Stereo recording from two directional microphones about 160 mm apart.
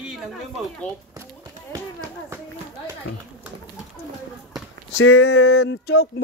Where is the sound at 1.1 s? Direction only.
25° right (ahead or behind).